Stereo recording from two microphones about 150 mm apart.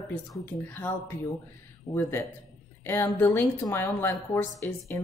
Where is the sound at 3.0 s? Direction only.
20° left (ahead or behind).